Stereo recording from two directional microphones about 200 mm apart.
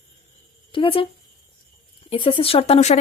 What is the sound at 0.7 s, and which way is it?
Speech, 25° left (ahead or behind).